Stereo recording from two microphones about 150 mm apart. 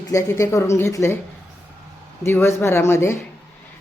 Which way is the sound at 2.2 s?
15° left (ahead or behind).